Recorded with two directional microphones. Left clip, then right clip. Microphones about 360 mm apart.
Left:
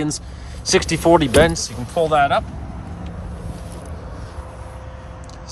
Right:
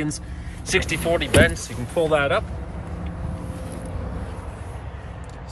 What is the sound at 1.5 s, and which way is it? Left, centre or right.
Speech, centre.